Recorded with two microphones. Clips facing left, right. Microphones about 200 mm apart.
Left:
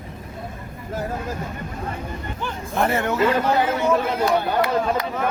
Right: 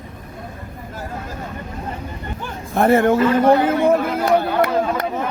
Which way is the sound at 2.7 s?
55° right (ahead or behind).